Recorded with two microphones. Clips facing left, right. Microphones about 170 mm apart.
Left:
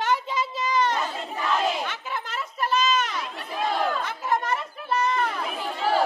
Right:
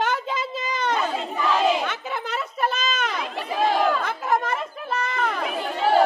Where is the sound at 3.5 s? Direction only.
90° right.